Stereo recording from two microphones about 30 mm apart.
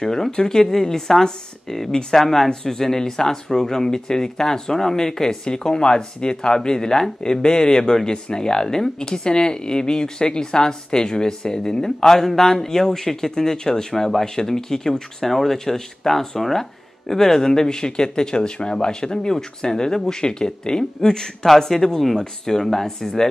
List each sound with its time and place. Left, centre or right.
0.0 s speech: centre
21.5 s speech: centre